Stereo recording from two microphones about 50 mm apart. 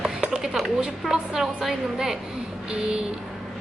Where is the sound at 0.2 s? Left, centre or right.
Centre.